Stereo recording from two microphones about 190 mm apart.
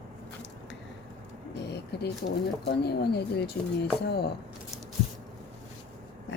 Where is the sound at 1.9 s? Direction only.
60° left (ahead or behind).